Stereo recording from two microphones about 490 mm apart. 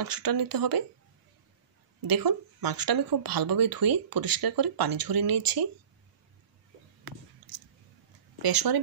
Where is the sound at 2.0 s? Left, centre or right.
Right.